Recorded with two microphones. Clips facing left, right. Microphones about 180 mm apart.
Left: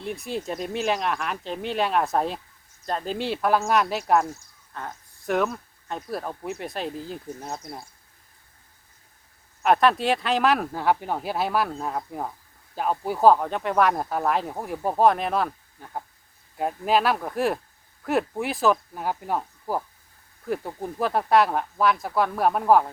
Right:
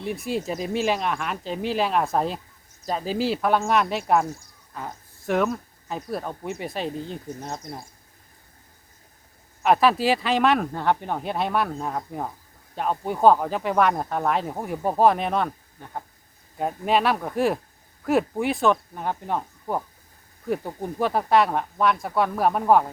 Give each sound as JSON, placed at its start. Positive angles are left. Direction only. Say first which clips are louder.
{"t": 0.0, "sound": "speech", "louder": "right 3 dB", "side_deg": 0}
{"t": 9.6, "sound": "speech", "louder": "right 1 dB", "side_deg": 0}